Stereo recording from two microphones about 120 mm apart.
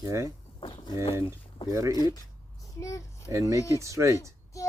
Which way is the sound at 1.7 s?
25° right (ahead or behind).